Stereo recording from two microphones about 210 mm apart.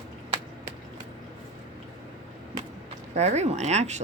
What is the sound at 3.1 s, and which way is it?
Speech, 30° right (ahead or behind).